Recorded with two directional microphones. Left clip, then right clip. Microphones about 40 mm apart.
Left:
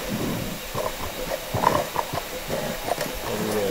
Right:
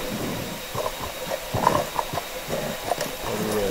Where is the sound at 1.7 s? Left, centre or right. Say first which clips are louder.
Even; right.